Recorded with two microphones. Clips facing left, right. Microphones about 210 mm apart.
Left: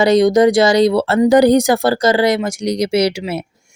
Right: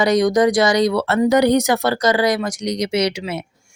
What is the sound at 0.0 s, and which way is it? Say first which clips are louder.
Speech: left 4 dB; 25° left (ahead or behind).